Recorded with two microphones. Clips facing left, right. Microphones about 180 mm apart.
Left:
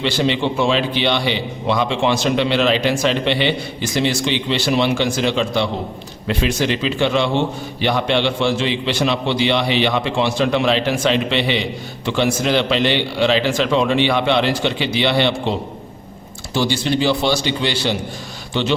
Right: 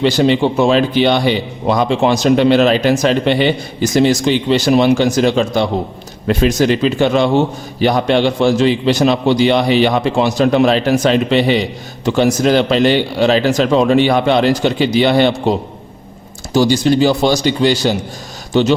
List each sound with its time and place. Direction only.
0.0 s a man's voice: 40° right (ahead or behind)